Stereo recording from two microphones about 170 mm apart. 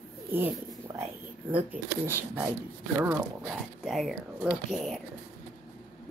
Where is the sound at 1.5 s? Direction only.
10° right (ahead or behind).